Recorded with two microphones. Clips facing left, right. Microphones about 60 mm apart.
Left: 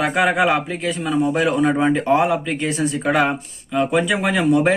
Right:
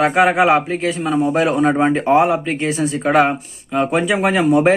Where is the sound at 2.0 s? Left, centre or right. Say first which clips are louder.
Right 3 dB; centre.